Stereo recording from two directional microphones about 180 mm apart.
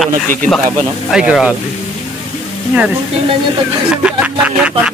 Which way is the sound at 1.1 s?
5° right (ahead or behind).